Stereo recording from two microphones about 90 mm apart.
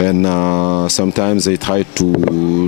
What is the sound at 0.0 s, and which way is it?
Speech, 15° left (ahead or behind).